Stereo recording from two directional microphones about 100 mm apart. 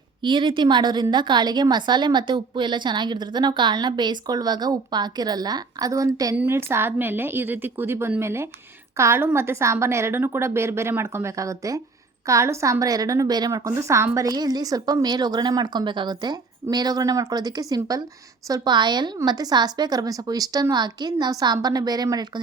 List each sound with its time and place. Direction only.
0.2 s a woman's voice: 55° right (ahead or behind); by 6.3 s 35° right (ahead or behind)
6.3 s a woman's voice: 20° right (ahead or behind)
14.3 s speech: 40° right (ahead or behind)